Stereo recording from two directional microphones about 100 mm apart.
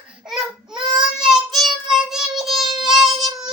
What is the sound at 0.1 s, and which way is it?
Baby cry, 5° right (ahead or behind).